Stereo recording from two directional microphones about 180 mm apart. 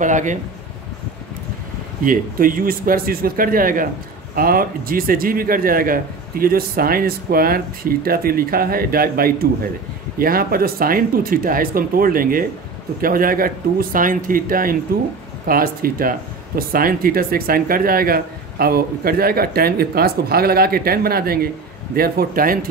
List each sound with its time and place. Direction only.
0.0 s speech: 45° right (ahead or behind)
2.0 s speech: 50° right (ahead or behind)